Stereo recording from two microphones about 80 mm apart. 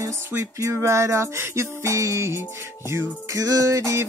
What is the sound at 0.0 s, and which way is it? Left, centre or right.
Music, right.